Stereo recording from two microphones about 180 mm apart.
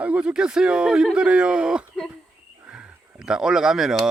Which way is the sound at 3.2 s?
5° right (ahead or behind).